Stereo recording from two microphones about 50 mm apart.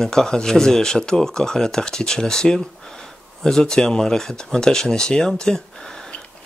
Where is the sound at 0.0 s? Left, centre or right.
Centre.